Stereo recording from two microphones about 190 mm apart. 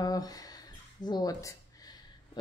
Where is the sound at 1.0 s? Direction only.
20° left (ahead or behind).